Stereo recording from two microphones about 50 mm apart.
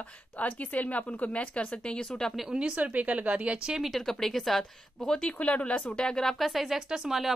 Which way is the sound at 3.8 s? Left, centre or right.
Centre.